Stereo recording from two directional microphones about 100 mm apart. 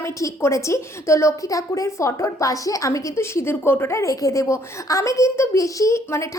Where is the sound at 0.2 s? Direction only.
30° left (ahead or behind).